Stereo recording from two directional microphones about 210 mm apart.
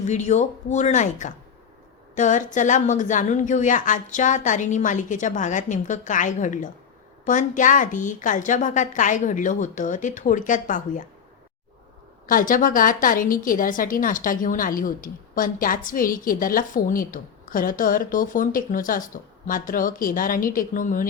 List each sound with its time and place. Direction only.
0.0 s a woman's voice: 35° left (ahead or behind)
12.2 s a woman's voice: 40° left (ahead or behind)